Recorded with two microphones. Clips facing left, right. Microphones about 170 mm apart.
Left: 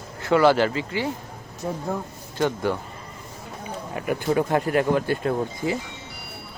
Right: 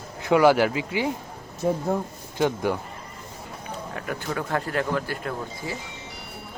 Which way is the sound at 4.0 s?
15° left (ahead or behind).